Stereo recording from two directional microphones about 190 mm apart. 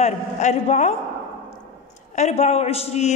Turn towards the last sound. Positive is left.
turn(degrees=35)  # may be behind; listen again after turning